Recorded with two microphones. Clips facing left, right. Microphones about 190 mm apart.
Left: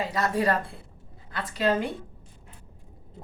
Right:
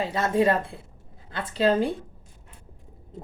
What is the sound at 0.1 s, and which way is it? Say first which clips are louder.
A woman's voice: right 4 dB; 25° right (ahead or behind).